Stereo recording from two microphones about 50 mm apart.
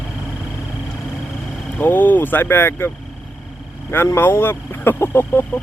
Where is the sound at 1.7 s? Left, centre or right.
Left.